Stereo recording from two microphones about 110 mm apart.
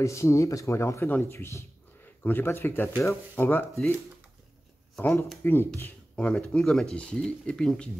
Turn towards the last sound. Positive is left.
turn(degrees=5)  # may be behind; listen again after turning